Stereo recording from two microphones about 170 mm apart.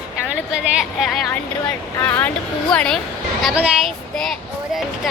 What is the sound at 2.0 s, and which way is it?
Speech, 10° left (ahead or behind).